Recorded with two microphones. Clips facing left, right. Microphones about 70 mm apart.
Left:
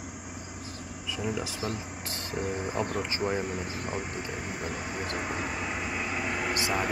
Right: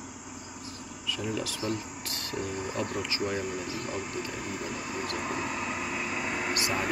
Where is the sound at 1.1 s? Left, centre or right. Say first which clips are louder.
Even; centre.